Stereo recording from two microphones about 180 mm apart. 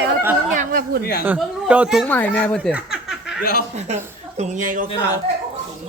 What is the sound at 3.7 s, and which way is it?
A woman's voice, 40° right (ahead or behind).